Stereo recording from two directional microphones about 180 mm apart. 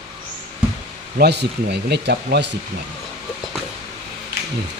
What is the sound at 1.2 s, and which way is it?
Speech, 65° right (ahead or behind).